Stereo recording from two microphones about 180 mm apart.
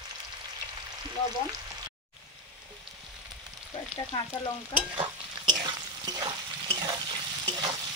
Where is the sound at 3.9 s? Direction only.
25° left (ahead or behind).